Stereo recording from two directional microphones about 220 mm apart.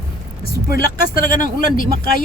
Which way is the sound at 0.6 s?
40° left (ahead or behind).